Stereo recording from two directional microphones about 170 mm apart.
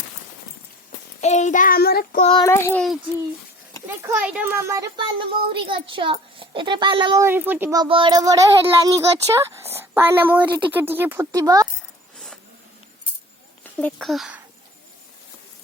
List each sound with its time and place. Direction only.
1.2 s child singing: 45° left (ahead or behind); by 2.2 s 65° left (ahead or behind)
2.3 s a child's voice: 20° left (ahead or behind)
3.8 s a child's voice: 10° right (ahead or behind); by 7.3 s 25° right (ahead or behind)
7.3 s speech: 10° right (ahead or behind)
7.8 s speech: 30° right (ahead or behind)
13.7 s speech: 5° left (ahead or behind)